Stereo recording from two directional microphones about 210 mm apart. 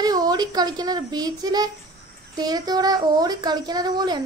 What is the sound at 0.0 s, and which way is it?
A child's voice, 20° right (ahead or behind).